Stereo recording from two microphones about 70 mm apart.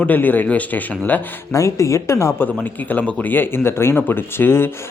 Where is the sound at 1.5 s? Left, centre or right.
Left.